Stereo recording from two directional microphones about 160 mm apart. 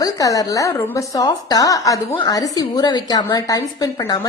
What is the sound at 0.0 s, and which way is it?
Speech, 20° left (ahead or behind).